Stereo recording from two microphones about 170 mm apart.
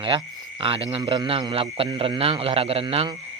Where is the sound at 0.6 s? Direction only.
30° right (ahead or behind).